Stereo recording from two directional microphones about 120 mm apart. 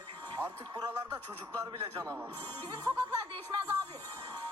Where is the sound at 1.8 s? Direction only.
50° right (ahead or behind).